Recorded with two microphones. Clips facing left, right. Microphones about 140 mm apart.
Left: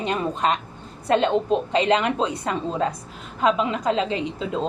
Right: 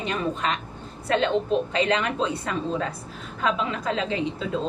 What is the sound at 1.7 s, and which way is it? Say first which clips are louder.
Speech: left 4 dB; 25° left (ahead or behind).